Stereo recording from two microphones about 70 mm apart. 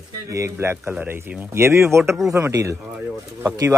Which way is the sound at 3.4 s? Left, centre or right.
Right.